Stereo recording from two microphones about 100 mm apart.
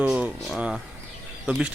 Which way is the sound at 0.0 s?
10° right (ahead or behind).